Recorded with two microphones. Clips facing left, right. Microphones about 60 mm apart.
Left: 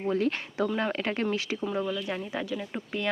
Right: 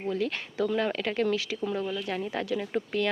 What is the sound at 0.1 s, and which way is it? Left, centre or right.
Speech, left.